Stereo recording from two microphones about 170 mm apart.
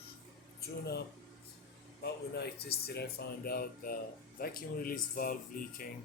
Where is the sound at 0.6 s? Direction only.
70° left (ahead or behind); by 5.3 s 55° left (ahead or behind).